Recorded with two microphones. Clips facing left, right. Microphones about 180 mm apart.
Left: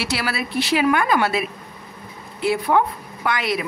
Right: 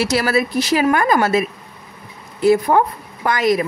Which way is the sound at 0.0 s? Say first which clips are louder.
Right 8 dB; 45° right (ahead or behind).